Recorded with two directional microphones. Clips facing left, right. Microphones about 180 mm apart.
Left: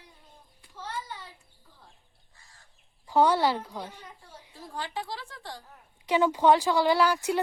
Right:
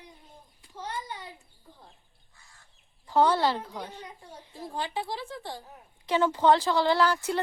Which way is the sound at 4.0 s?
15° right (ahead or behind).